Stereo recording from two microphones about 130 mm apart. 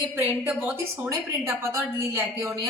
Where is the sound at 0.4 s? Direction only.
10° right (ahead or behind).